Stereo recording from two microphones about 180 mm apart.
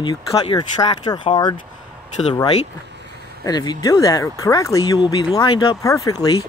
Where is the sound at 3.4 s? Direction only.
20° left (ahead or behind).